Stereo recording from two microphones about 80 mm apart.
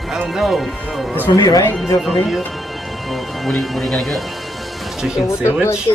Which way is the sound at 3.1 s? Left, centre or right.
Centre.